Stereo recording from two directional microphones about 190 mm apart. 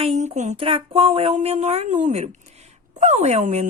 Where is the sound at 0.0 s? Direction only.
35° right (ahead or behind).